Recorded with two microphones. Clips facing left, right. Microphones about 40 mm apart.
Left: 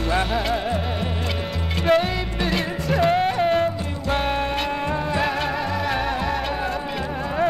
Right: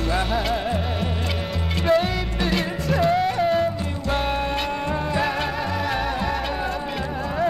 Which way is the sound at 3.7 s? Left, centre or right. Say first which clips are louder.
Left 1 dB; centre.